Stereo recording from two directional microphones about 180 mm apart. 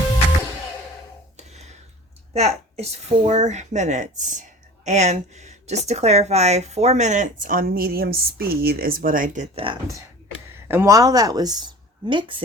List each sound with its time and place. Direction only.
2.3 s speech: 35° right (ahead or behind)
10.7 s speech: 15° right (ahead or behind)